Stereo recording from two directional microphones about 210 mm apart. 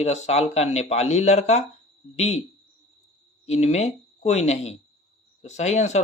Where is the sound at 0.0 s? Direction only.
30° left (ahead or behind).